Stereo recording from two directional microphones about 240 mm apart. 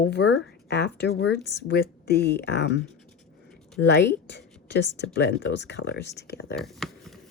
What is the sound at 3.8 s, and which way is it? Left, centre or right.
Speech, left.